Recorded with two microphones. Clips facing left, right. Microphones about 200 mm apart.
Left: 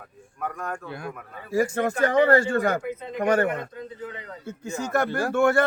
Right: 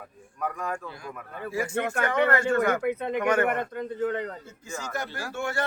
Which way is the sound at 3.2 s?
35° left (ahead or behind).